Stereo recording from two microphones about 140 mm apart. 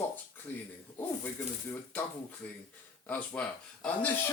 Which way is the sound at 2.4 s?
10° left (ahead or behind).